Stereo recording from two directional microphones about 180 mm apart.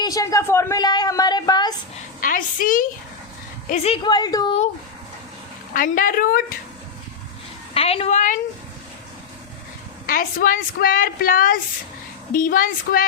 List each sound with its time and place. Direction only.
0.0 s a woman's voice: 20° left (ahead or behind)
2.2 s a woman's voice: 50° left (ahead or behind)
3.8 s a woman's voice: 25° left (ahead or behind)
5.7 s a woman's voice: 50° left (ahead or behind)
7.7 s a woman's voice: 35° left (ahead or behind)
10.1 s a woman's voice: 50° left (ahead or behind)